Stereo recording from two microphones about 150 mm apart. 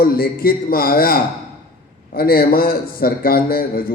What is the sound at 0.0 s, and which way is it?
A man's voice, 80° left.